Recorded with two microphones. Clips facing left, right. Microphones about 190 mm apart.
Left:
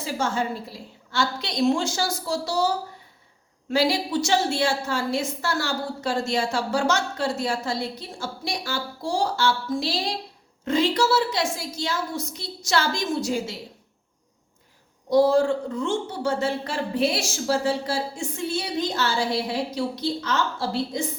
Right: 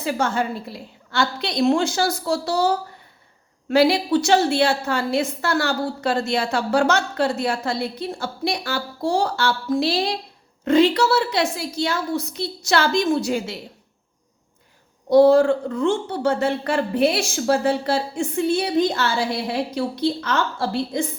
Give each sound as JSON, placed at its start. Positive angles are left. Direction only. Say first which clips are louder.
{"t": 0.0, "sound": "a woman's voice", "louder": "right 3 dB", "side_deg": -65}
{"t": 15.1, "sound": "a woman's voice", "louder": "right 5 dB", "side_deg": -60}